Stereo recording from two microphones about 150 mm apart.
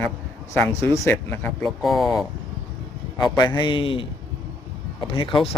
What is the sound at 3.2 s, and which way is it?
Speech, 30° left (ahead or behind).